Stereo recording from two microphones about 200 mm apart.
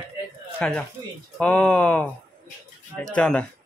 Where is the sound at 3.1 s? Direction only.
5° left (ahead or behind).